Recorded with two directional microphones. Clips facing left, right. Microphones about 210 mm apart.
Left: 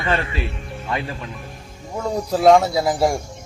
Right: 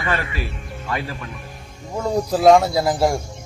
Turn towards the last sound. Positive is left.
turn(degrees=0)  # may be behind; listen again after turning